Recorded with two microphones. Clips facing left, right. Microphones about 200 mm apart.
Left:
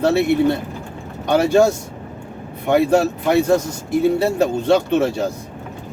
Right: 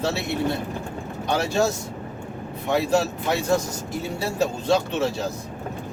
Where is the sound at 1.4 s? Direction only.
55° left (ahead or behind).